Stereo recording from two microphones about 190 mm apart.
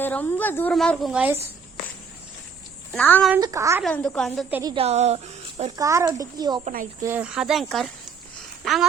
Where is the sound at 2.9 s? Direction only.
10° left (ahead or behind).